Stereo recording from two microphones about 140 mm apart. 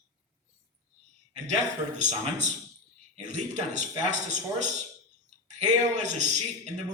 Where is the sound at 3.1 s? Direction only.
55° right (ahead or behind).